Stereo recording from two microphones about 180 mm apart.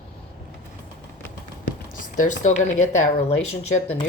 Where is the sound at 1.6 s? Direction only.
45° left (ahead or behind).